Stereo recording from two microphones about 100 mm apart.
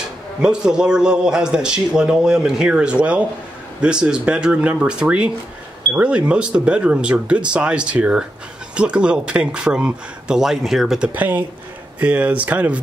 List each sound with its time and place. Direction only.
0.4 s a man's voice: 10° right (ahead or behind)
11.1 s a man's voice: 15° right (ahead or behind)